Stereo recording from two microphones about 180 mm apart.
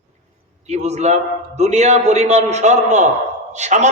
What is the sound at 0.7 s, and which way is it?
A man's voice, 40° right (ahead or behind).